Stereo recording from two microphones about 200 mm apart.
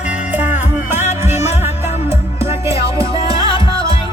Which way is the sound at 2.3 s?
30° left (ahead or behind).